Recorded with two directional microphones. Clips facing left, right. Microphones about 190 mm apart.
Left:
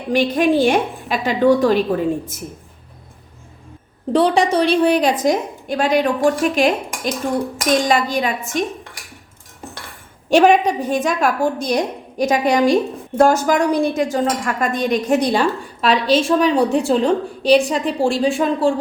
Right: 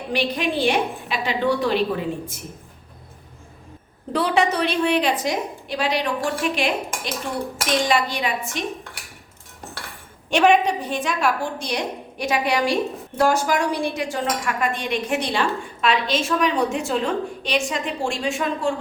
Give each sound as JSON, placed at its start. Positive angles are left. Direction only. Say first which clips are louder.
{"t": 0.1, "sound": "a woman's voice", "louder": "left 8 dB", "side_deg": 45}
{"t": 4.1, "sound": "a woman's voice", "louder": "left 5 dB", "side_deg": 30}
{"t": 10.2, "sound": "a woman's voice", "louder": "left 4 dB", "side_deg": 40}